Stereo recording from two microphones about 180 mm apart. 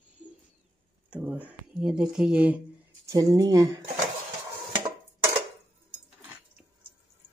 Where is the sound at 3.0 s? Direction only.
20° right (ahead or behind).